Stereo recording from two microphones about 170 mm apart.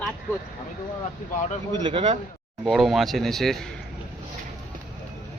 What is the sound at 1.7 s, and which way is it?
Speech, 25° right (ahead or behind).